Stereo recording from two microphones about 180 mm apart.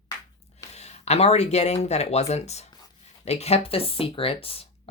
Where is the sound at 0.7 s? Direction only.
35° left (ahead or behind).